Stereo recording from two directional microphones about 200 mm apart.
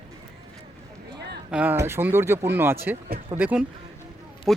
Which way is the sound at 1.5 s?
10° right (ahead or behind).